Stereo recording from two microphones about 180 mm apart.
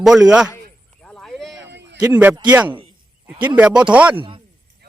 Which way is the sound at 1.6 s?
75° right (ahead or behind).